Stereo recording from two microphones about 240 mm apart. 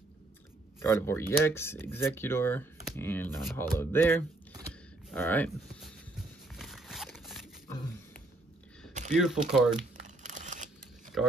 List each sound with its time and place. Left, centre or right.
0.7 s speech: centre
6.5 s a sound: centre
9.1 s speech: centre
9.8 s crumpling: right
11.2 s speech: centre